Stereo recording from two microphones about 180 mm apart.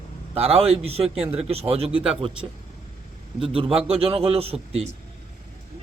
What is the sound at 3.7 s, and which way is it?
Speech, 35° right (ahead or behind).